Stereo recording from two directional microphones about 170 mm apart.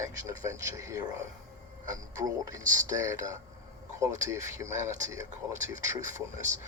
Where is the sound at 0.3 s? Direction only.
20° right (ahead or behind).